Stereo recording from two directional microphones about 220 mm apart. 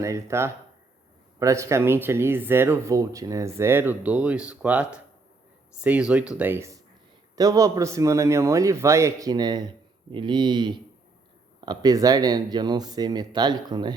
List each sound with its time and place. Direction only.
0.0 s speech: 15° right (ahead or behind)